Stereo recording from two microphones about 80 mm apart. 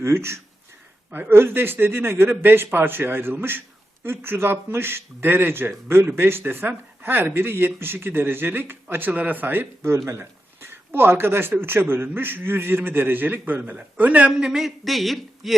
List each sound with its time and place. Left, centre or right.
0.0 s speech: right; by 15.5 s centre